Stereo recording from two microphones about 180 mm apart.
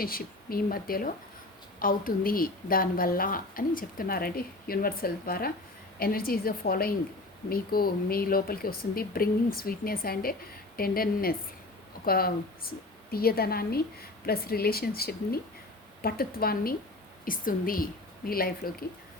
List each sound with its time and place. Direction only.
0.0 s a woman's voice: 55° left (ahead or behind)